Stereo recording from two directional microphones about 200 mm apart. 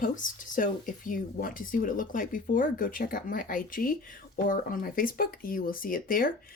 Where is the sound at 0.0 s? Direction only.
40° left (ahead or behind).